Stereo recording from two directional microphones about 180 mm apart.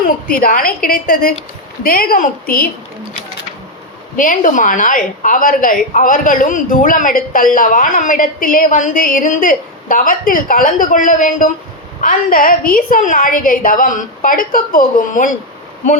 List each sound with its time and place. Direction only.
0.3 s a woman's voice: 55° left (ahead or behind)
4.2 s a woman's voice: 45° left (ahead or behind)